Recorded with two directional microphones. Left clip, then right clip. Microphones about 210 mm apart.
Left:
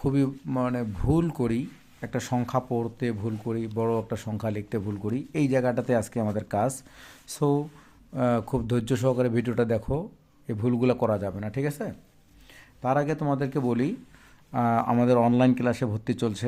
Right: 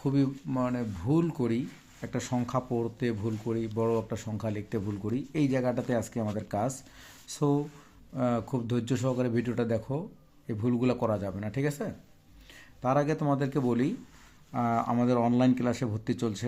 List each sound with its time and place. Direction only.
0.0 s speech: 25° left (ahead or behind)